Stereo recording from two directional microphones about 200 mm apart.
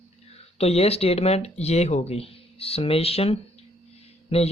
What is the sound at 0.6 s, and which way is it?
Speech, 30° left (ahead or behind).